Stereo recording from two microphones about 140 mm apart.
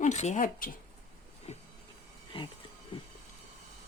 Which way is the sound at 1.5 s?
50° left (ahead or behind).